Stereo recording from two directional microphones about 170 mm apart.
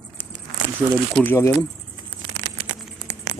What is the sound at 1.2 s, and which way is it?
Speech, 15° left (ahead or behind).